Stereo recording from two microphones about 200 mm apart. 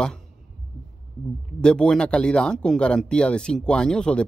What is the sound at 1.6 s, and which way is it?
Speech, 5° left (ahead or behind).